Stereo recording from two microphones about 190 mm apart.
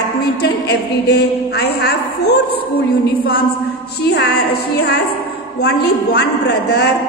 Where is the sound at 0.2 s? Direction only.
60° left (ahead or behind).